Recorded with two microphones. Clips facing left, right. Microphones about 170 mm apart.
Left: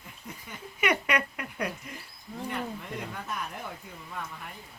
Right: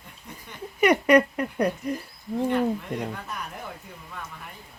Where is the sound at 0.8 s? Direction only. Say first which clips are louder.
Right 10 dB; 35° right (ahead or behind).